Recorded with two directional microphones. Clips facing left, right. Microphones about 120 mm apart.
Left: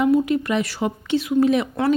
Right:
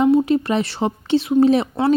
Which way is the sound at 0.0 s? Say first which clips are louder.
Right 3 dB; 30° right (ahead or behind).